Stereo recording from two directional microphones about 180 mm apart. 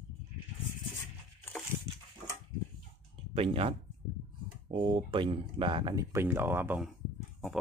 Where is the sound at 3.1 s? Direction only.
30° right (ahead or behind).